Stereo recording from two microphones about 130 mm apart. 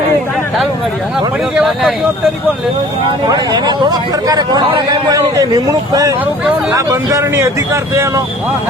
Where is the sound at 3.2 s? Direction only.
30° right (ahead or behind).